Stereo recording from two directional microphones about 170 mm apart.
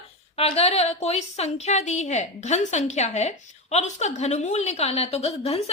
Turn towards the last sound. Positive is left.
turn(degrees=35)  # may be behind; listen again after turning